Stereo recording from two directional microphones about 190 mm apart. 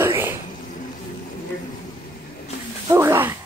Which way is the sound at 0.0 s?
10° right (ahead or behind).